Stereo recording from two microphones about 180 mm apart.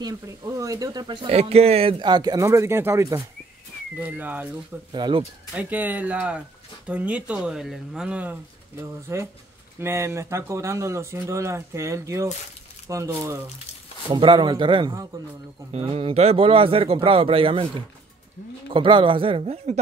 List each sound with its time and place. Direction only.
0.0 s speech: 20° right (ahead or behind)
4.9 s speech: 25° right (ahead or behind)
5.5 s speech: 10° right (ahead or behind)
14.1 s speech: 25° right (ahead or behind)
18.7 s speech: 30° right (ahead or behind)